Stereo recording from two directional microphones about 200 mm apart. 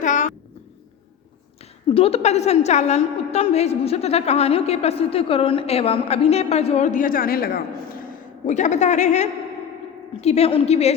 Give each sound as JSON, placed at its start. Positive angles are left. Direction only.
{"t": 0.0, "sound": "a sound", "side_deg": 40}
{"t": 1.9, "sound": "a woman's voice", "side_deg": 30}
{"t": 8.4, "sound": "a woman's voice", "side_deg": 35}